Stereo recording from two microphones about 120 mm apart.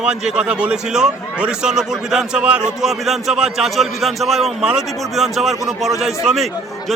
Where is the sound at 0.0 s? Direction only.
5° right (ahead or behind).